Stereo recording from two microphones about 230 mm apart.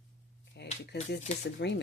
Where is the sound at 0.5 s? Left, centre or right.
Left.